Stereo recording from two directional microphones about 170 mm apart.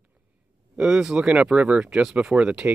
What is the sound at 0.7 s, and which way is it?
Speech, 5° right (ahead or behind).